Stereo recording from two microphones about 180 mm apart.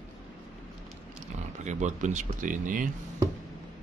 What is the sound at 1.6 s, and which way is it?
Speech, 40° right (ahead or behind).